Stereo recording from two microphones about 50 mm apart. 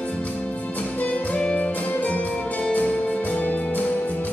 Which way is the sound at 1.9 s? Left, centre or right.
Left.